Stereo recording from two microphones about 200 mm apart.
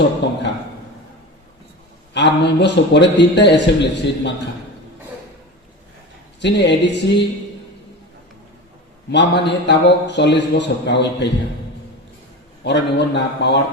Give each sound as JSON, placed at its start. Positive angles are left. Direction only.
{"t": 0.2, "sound": "a sound", "side_deg": 60}
{"t": 2.1, "sound": "a man's voice", "side_deg": 60}
{"t": 6.4, "sound": "a man's voice", "side_deg": 60}
{"t": 9.1, "sound": "a man's voice", "side_deg": 60}
{"t": 12.6, "sound": "a man's voice", "side_deg": 60}